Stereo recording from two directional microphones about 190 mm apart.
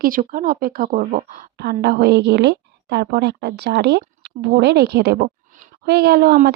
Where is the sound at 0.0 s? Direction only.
45° right (ahead or behind).